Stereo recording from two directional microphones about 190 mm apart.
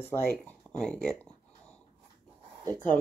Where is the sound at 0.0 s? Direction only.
10° left (ahead or behind).